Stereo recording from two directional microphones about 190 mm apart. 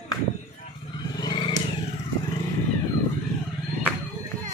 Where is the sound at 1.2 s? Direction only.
25° left (ahead or behind).